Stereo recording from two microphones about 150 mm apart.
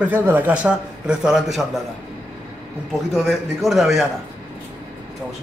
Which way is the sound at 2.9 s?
Centre (ahead or behind).